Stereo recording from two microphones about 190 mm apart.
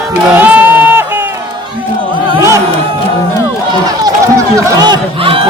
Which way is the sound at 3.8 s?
20° right (ahead or behind).